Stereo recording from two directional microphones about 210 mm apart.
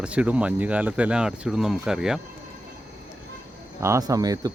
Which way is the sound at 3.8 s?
15° right (ahead or behind).